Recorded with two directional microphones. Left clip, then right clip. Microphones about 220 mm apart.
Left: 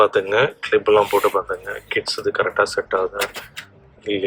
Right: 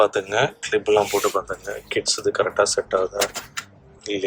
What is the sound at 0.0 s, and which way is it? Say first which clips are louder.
Speech: left 3 dB; 5° right (ahead or behind).